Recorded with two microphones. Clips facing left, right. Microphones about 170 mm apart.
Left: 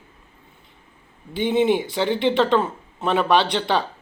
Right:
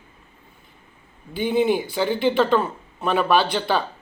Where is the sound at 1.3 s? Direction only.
25° left (ahead or behind).